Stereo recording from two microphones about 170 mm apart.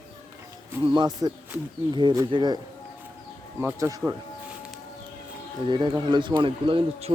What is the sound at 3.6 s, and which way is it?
Speech, 15° right (ahead or behind).